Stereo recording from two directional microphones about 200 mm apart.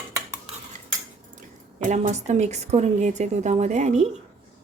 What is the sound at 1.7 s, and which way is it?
A woman's voice, 35° right (ahead or behind).